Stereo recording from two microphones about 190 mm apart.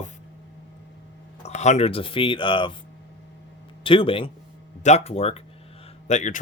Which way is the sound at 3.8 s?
30° left (ahead or behind).